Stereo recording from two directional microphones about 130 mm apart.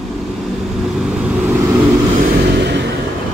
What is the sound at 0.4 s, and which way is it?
Vehicle, centre (ahead or behind).